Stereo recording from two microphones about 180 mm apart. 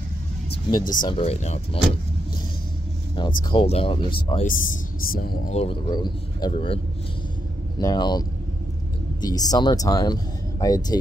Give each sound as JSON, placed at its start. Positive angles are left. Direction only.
{"t": 0.5, "sound": "vehicle", "side_deg": 25}
{"t": 1.0, "sound": "speech", "side_deg": 30}
{"t": 3.2, "sound": "speech", "side_deg": 25}
{"t": 4.5, "sound": "speech", "side_deg": 50}
{"t": 5.5, "sound": "speech", "side_deg": 30}
{"t": 7.8, "sound": "speech", "side_deg": 25}